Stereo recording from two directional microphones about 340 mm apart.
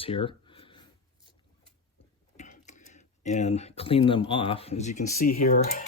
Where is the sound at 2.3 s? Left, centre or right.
Left.